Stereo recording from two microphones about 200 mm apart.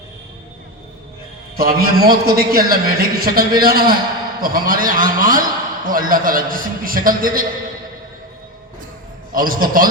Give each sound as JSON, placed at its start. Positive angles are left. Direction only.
{"t": 1.5, "sound": "a man's voice", "side_deg": -50}
{"t": 9.3, "sound": "a man's voice", "side_deg": -45}